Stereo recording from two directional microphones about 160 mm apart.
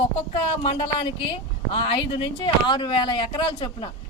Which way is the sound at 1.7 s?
35° left (ahead or behind).